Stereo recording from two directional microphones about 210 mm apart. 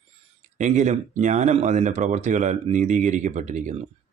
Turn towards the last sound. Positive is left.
turn(degrees=-35)  # may be behind; listen again after turning